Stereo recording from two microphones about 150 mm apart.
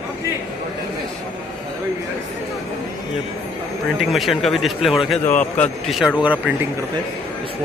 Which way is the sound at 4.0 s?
Centre (ahead or behind).